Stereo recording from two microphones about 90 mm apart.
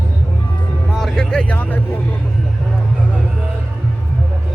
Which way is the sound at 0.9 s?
5° left (ahead or behind).